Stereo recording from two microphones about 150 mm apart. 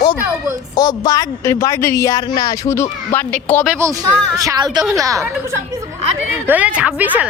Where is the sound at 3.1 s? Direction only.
10° left (ahead or behind).